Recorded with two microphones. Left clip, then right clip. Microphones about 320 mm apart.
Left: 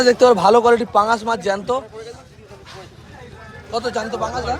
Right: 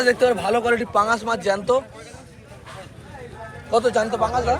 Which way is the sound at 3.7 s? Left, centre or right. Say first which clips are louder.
Right 4 dB; centre.